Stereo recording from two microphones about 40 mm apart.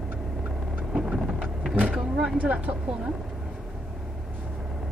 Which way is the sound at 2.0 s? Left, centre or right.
Centre.